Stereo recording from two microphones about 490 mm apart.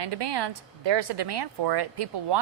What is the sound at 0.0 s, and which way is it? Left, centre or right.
A woman's voice, right.